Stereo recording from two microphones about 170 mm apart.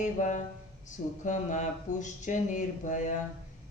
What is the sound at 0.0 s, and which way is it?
Speech, 45° left (ahead or behind).